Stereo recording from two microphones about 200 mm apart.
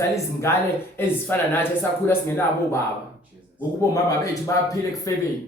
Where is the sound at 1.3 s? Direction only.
10° left (ahead or behind).